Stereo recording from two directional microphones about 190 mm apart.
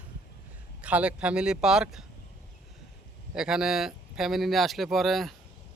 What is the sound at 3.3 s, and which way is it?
Speech, 5° right (ahead or behind).